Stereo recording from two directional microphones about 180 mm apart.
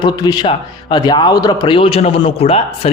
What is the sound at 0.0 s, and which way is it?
Speech, 25° left (ahead or behind).